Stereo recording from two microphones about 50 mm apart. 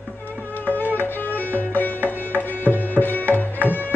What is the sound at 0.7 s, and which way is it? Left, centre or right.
Music, left.